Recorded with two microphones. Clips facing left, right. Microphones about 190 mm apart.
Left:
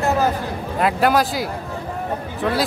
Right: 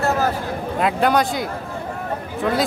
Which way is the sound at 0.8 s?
Centre (ahead or behind).